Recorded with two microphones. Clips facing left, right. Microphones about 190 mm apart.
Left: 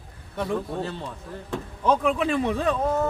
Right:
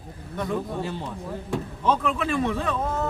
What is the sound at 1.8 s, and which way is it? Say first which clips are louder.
Speech: left 3 dB; 15° left (ahead or behind).